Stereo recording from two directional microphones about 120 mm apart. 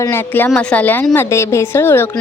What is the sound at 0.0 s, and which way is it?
A woman's voice, 20° left (ahead or behind).